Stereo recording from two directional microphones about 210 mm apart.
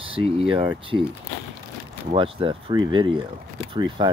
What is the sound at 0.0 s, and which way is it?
Speech, 25° right (ahead or behind).